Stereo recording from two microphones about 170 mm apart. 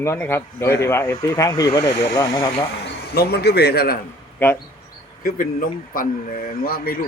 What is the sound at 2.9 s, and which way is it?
A man's voice, 85° left.